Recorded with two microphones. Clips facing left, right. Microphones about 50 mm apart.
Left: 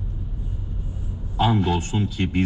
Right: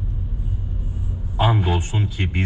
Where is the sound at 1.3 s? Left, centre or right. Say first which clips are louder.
Even; centre.